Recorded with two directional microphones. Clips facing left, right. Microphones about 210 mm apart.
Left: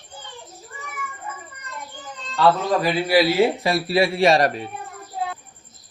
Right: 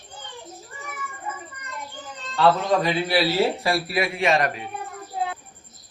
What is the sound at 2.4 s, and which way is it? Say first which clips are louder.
A man's voice: left 1 dB; 5° left (ahead or behind).